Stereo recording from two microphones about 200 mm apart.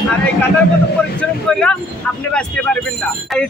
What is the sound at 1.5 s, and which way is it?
A man's voice, 5° left (ahead or behind).